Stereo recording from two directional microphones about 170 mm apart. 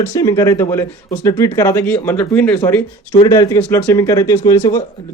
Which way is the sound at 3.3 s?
20° left (ahead or behind).